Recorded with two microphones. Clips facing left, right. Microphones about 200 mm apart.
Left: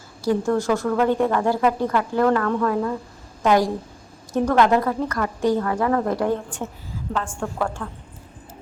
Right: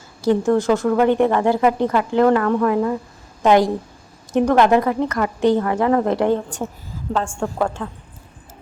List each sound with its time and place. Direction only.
0.2 s speech: 20° right (ahead or behind)